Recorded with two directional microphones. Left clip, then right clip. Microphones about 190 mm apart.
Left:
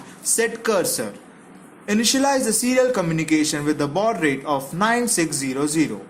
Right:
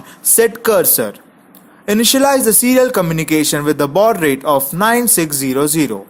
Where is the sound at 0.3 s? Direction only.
40° right (ahead or behind).